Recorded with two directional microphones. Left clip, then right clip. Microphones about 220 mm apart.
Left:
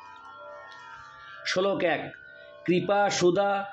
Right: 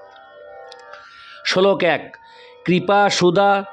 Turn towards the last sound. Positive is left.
turn(degrees=-55)  # may be behind; listen again after turning